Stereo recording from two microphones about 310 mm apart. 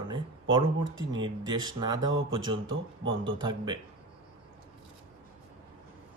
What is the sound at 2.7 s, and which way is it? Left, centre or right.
Speech, right.